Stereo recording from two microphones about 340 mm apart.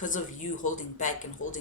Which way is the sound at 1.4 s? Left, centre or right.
Left.